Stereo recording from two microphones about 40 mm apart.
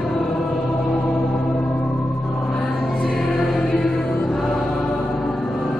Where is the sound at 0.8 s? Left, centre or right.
Centre.